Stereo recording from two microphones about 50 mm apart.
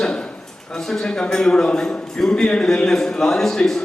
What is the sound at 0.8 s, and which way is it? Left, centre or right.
A man's voice, centre.